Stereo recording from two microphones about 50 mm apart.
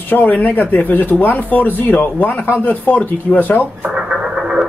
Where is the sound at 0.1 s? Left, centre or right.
Left.